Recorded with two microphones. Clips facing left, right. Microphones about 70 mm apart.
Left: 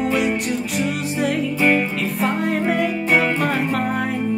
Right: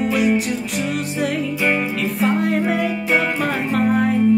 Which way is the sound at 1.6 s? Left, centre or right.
Centre.